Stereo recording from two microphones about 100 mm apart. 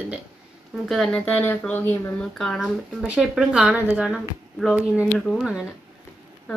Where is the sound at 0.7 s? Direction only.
5° left (ahead or behind).